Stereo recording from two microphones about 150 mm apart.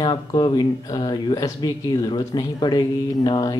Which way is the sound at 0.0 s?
30° left (ahead or behind).